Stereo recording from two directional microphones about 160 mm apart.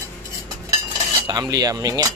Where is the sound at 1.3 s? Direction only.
25° right (ahead or behind).